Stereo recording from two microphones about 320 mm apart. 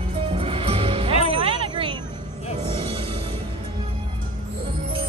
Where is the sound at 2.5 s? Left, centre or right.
Centre.